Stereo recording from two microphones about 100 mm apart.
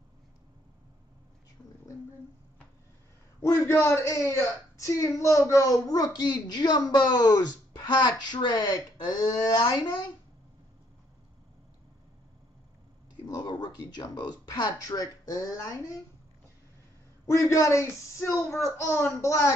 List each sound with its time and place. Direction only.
3.3 s a man's voice: 30° left (ahead or behind); by 10.0 s 50° left (ahead or behind)
13.3 s speech: 45° left (ahead or behind)
17.3 s a man's voice: 30° left (ahead or behind)